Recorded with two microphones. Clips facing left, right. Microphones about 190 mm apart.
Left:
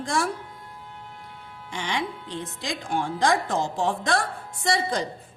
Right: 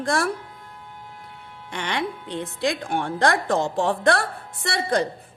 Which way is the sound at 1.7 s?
60° right (ahead or behind).